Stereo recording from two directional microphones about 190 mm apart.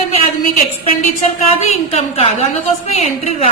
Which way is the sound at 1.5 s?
35° left (ahead or behind).